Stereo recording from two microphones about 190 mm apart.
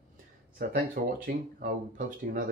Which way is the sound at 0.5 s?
50° right (ahead or behind).